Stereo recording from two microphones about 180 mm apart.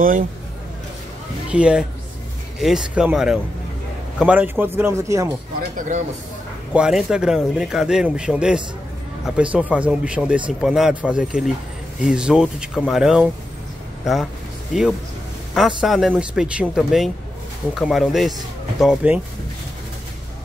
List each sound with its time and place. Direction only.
1.5 s a man's voice: 5° right (ahead or behind)
5.8 s speech: 40° right (ahead or behind)
6.7 s a man's voice: 5° right (ahead or behind)
15.5 s a man's voice: centre (ahead or behind)